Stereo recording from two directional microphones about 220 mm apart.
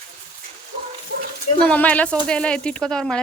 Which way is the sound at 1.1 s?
45° right (ahead or behind).